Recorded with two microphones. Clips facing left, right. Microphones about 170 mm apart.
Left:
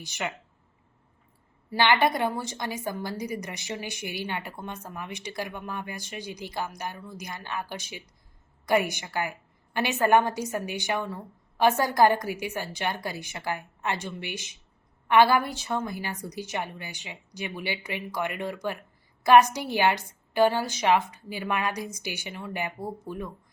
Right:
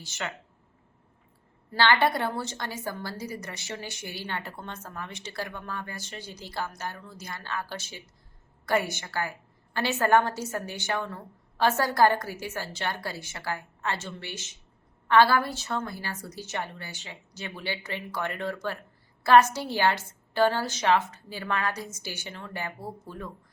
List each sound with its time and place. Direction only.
0.0 s a woman's voice: 15° left (ahead or behind)
1.7 s a woman's voice: 15° left (ahead or behind)